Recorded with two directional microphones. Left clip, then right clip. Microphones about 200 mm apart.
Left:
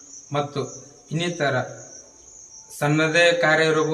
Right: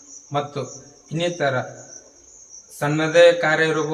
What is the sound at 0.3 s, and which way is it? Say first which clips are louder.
A man's voice: even; 15° left (ahead or behind).